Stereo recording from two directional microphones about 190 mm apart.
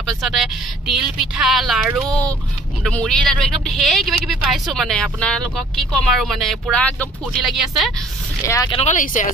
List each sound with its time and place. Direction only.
0.0 s speech: centre (ahead or behind)
8.5 s speech: 20° left (ahead or behind)
8.7 s speech: 40° left (ahead or behind)